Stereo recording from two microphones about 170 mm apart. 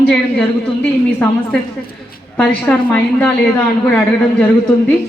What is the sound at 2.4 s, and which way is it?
Speech, 10° left (ahead or behind).